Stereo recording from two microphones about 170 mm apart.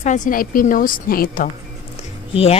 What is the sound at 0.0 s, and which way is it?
A woman's voice, 45° left (ahead or behind).